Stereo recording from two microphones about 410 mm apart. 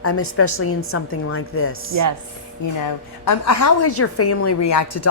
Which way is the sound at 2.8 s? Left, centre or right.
Left.